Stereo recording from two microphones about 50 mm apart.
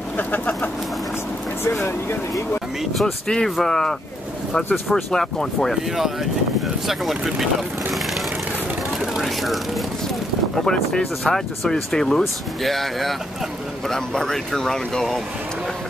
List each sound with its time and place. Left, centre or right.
1.6 s speech: left
3.0 s speech: centre
4.9 s speech: centre
6.9 s speech: centre
9.0 s vehicle: centre
10.5 s speech: centre